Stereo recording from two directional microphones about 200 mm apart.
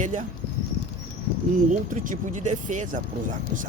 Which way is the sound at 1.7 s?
40° right (ahead or behind).